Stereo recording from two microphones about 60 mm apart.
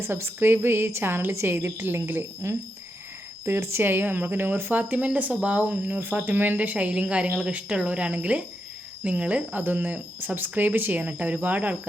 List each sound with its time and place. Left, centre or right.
0.0 s a woman's voice: right
2.4 s a woman's voice: right